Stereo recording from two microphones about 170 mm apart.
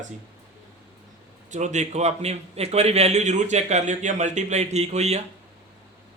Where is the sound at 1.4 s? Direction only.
45° right (ahead or behind).